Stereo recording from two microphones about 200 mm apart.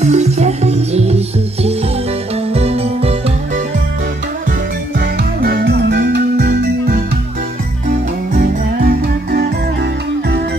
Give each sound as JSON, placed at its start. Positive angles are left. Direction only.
{"t": 0.0, "sound": "music", "side_deg": -35}
{"t": 5.4, "sound": "music", "side_deg": -50}
{"t": 8.4, "sound": "music", "side_deg": -45}